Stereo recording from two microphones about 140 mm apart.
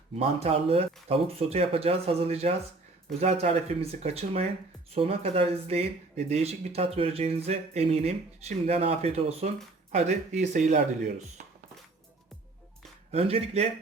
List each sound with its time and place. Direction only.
0.2 s speech: 45° right (ahead or behind)
13.1 s speech: 45° right (ahead or behind)